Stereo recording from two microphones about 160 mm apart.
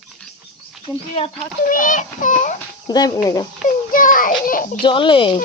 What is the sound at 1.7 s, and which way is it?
Speech, 55° left (ahead or behind).